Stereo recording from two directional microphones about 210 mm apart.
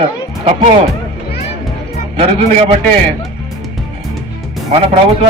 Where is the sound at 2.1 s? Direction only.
30° right (ahead or behind).